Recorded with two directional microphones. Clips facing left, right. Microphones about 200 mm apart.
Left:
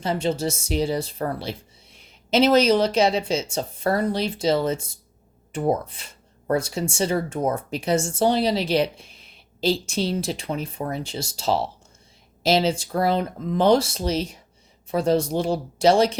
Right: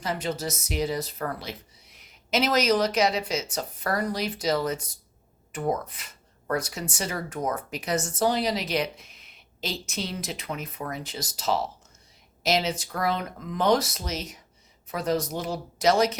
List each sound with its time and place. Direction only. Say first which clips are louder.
0.0 s speech: left 6 dB; 30° left (ahead or behind)